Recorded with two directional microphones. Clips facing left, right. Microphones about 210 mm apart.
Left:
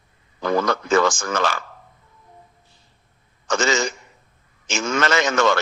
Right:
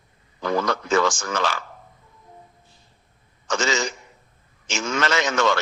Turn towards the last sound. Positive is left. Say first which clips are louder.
# left 3 dB
turn(degrees=50)  # may be behind; listen again after turning